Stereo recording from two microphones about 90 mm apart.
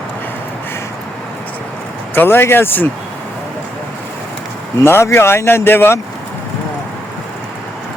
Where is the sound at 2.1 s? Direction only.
25° left (ahead or behind).